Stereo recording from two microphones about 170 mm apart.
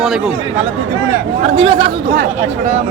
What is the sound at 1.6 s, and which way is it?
Speech, 30° right (ahead or behind).